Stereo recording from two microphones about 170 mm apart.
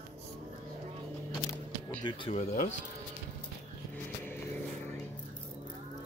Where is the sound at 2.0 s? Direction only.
30° left (ahead or behind).